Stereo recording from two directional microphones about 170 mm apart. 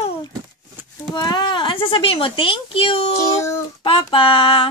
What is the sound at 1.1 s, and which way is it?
A woman's voice, 25° left (ahead or behind).